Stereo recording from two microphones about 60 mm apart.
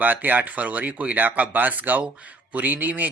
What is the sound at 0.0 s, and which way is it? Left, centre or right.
Speech, right.